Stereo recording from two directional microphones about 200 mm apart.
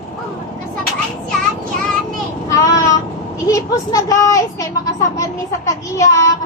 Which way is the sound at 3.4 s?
15° left (ahead or behind).